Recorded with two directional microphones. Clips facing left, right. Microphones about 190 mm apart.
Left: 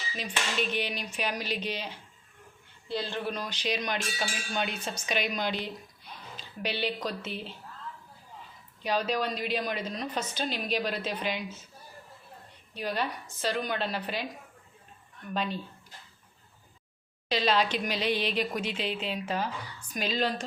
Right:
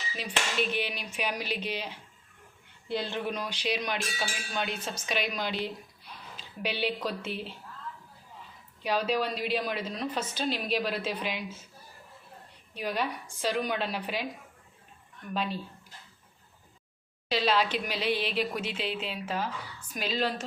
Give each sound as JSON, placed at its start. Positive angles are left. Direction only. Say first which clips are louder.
{"t": 0.2, "sound": "speech", "louder": "right 1 dB", "side_deg": -5}
{"t": 2.9, "sound": "a woman's voice", "louder": "right 1 dB", "side_deg": -20}
{"t": 8.8, "sound": "a woman's voice", "louder": "right 1 dB", "side_deg": -5}
{"t": 12.7, "sound": "speech", "louder": "even", "side_deg": -10}
{"t": 15.3, "sound": "a woman's voice", "louder": "even", "side_deg": -5}
{"t": 17.2, "sound": "a woman's voice", "louder": "even", "side_deg": -5}